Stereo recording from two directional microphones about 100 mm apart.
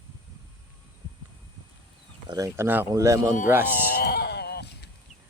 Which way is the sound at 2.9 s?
35° right (ahead or behind).